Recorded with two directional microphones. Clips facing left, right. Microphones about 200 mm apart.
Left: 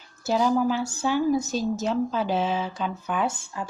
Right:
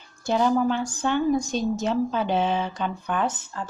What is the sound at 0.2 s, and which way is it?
A woman's voice, 5° left (ahead or behind).